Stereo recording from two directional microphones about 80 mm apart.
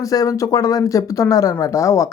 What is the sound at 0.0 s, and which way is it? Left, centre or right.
Speech, left.